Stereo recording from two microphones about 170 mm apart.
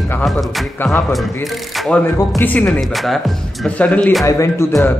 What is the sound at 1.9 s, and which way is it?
A man's voice, 10° left (ahead or behind).